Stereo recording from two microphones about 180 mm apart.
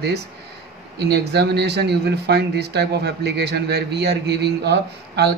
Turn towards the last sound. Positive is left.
turn(degrees=-65)  # may be behind; listen again after turning